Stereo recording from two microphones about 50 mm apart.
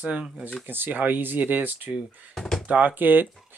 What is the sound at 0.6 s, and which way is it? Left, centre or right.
Speech, right.